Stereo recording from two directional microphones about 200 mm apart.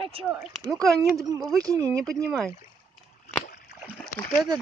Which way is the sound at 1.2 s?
15° right (ahead or behind).